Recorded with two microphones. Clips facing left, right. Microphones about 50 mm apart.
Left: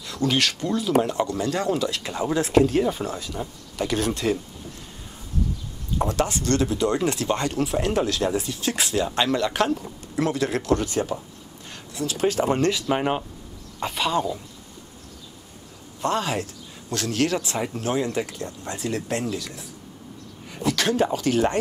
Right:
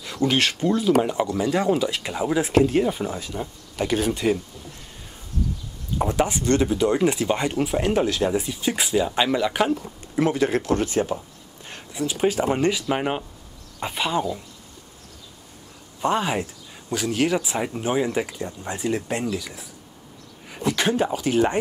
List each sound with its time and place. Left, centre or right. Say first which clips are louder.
0.0 s speech: right 2 dB; right
5.9 s speech: right 1 dB; centre
16.0 s speech: right 2 dB; centre